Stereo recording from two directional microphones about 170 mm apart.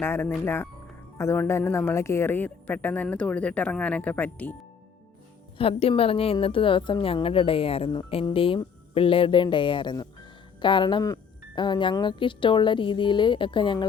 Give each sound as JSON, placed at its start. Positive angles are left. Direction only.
{"t": 0.0, "sound": "speech", "side_deg": 15}
{"t": 5.5, "sound": "a woman's voice", "side_deg": 35}